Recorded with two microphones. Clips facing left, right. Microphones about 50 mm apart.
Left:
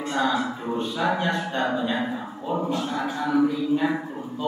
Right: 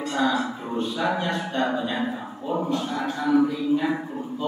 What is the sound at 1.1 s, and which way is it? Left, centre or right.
Speech, left.